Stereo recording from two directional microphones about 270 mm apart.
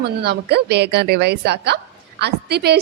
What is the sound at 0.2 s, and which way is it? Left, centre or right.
A woman's voice, right.